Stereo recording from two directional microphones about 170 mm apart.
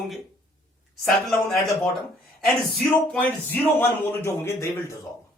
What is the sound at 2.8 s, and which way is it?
Speech, 10° left (ahead or behind).